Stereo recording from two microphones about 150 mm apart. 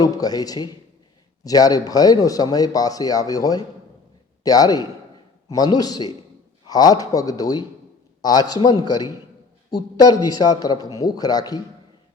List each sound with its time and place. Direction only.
0.0 s speech: 25° left (ahead or behind)